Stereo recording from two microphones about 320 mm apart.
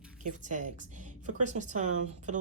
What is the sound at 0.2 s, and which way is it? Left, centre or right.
A woman's voice, right.